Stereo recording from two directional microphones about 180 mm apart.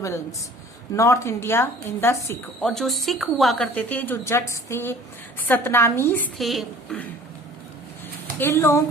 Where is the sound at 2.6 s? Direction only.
Centre (ahead or behind).